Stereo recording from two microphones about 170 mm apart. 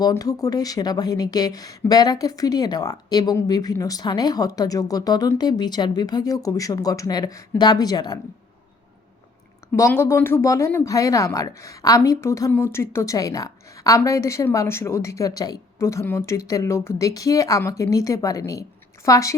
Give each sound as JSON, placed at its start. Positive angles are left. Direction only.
{"t": 0.0, "sound": "speech", "side_deg": 20}
{"t": 9.7, "sound": "speech", "side_deg": 15}